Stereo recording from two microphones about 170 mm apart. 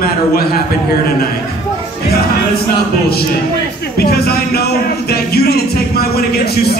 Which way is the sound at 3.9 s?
65° left (ahead or behind).